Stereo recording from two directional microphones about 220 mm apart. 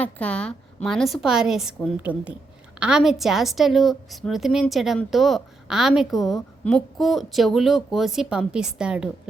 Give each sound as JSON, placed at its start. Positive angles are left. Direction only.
{"t": 0.0, "sound": "a woman's voice", "side_deg": 5}